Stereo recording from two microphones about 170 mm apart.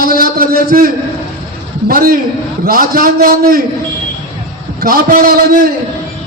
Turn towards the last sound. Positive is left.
turn(degrees=-60)  # may be behind; listen again after turning